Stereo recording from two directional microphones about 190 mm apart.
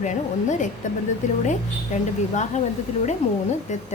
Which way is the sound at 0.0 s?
40° left (ahead or behind).